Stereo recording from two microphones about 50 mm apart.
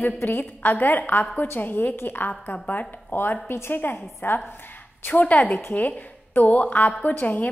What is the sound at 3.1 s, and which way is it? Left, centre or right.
A woman's voice, left.